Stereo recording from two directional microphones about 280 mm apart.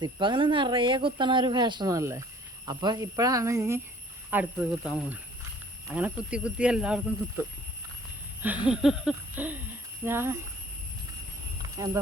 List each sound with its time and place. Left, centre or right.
0.0 s speech: centre
8.4 s speech: centre